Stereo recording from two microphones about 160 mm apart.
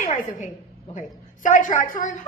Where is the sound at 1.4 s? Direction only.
50° left (ahead or behind).